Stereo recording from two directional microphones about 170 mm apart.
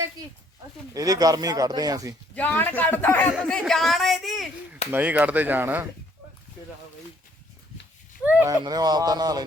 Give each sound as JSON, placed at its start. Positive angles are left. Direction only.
{"t": 0.9, "sound": "speech", "side_deg": -20}
{"t": 2.3, "sound": "speech", "side_deg": 10}
{"t": 3.3, "sound": "speech", "side_deg": 0}
{"t": 8.2, "sound": "speech", "side_deg": -10}
{"t": 8.4, "sound": "speech", "side_deg": -25}